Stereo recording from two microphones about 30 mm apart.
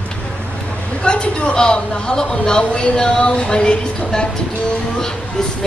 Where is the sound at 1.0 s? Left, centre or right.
Left.